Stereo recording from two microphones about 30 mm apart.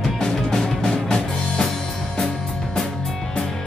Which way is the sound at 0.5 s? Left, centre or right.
Left.